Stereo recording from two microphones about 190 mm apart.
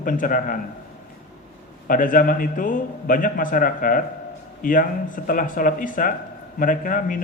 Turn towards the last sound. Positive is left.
turn(degrees=45)  # may be behind; listen again after turning